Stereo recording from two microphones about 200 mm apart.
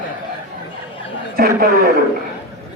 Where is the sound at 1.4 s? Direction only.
45° right (ahead or behind).